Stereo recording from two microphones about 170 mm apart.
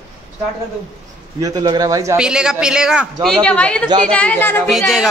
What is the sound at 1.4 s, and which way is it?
Speech, 25° right (ahead or behind).